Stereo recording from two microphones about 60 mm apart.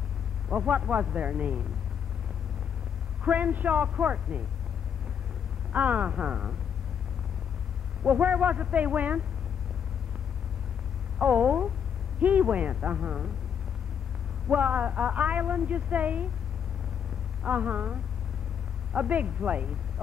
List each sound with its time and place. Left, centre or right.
0.5 s speech: right
3.3 s speech: right
5.7 s speech: right
8.0 s speech: right
11.1 s speech: right
14.5 s speech: right
17.5 s speech: right
18.9 s speech: right